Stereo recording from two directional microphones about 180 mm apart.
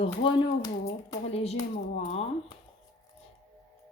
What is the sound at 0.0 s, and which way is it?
Speech, 30° left (ahead or behind).